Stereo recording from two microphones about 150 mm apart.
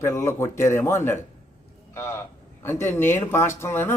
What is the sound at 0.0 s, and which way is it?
A man's voice, 15° left (ahead or behind).